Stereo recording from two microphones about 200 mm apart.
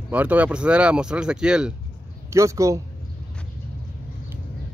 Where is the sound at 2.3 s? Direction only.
15° right (ahead or behind).